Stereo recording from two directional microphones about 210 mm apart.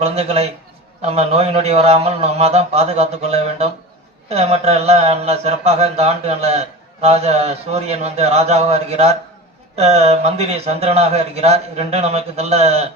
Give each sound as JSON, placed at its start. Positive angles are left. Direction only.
{"t": 0.0, "sound": "a man's voice", "side_deg": -30}